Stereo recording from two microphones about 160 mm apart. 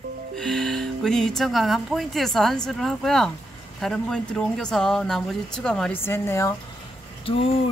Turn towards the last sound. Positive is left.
turn(degrees=35)  # may be behind; listen again after turning